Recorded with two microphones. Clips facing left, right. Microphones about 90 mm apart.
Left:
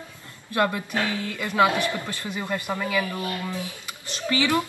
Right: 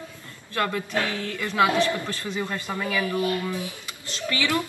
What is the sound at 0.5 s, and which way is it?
Speech, 20° left (ahead or behind).